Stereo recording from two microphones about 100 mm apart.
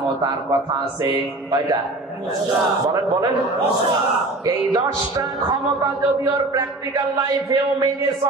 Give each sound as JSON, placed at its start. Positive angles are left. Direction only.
{"t": 1.0, "sound": "a man's voice", "side_deg": -40}
{"t": 2.9, "sound": "a man's voice", "side_deg": -35}
{"t": 4.5, "sound": "a man's voice", "side_deg": -40}